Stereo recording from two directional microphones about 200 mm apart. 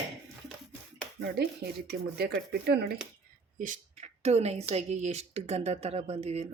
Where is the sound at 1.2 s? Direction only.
50° right (ahead or behind).